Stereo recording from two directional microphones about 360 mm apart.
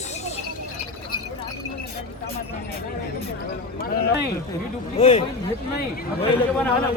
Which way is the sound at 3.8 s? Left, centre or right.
Left.